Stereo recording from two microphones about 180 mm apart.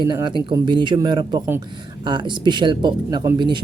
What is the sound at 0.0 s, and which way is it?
Speech, 25° right (ahead or behind).